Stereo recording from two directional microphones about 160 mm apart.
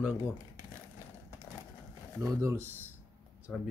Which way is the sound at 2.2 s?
20° right (ahead or behind).